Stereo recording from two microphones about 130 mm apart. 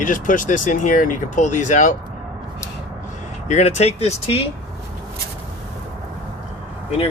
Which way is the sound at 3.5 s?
65° left (ahead or behind).